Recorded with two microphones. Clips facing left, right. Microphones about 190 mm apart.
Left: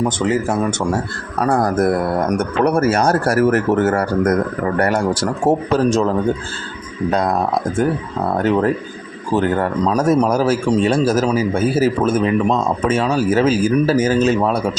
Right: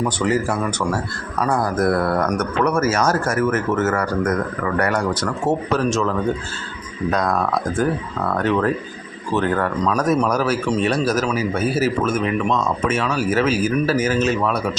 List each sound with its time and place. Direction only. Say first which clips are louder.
0.0 s a man's voice: left 2 dB; 20° left (ahead or behind)
1.4 s a man's voice: left 4 dB; 40° left (ahead or behind)
1.8 s a man's voice: left 2 dB; 20° left (ahead or behind)